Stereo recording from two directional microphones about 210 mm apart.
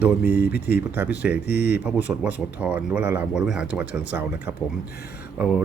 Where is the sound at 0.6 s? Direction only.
10° right (ahead or behind).